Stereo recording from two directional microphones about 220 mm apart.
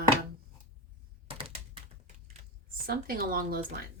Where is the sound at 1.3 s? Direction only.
25° right (ahead or behind).